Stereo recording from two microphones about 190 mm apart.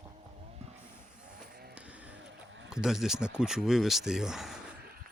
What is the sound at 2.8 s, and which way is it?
Speech, centre (ahead or behind).